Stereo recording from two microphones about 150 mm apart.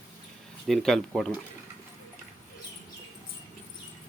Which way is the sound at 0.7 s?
5° left (ahead or behind).